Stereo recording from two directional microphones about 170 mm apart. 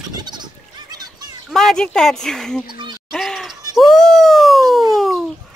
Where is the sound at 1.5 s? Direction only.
Centre (ahead or behind).